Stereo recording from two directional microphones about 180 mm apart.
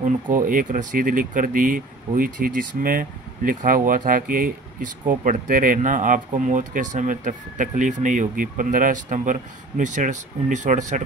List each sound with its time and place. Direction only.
0.0 s speech: 50° right (ahead or behind)